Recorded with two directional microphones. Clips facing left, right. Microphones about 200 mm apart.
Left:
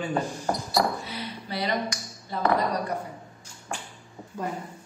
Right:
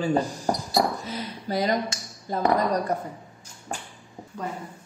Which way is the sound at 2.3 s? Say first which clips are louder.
Right 2 dB; 45° right (ahead or behind).